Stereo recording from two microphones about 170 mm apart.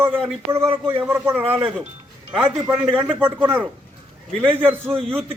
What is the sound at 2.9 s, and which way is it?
A man's voice, 15° right (ahead or behind).